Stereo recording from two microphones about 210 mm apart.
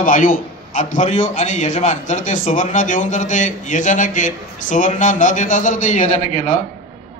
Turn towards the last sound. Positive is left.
turn(degrees=35)  # may be behind; listen again after turning